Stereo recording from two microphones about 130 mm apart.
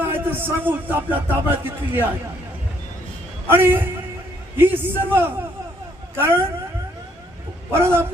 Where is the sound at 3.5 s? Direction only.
15° right (ahead or behind).